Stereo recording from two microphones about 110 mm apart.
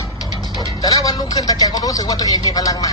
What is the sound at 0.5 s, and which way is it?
Speech, 35° left (ahead or behind).